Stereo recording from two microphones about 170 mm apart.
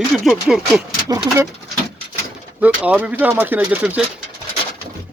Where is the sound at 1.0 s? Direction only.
20° right (ahead or behind).